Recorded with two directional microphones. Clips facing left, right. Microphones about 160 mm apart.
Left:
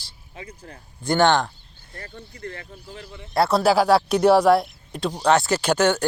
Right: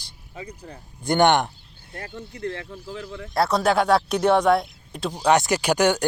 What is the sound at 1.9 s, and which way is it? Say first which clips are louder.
Speech: right 4 dB; 70° right (ahead or behind).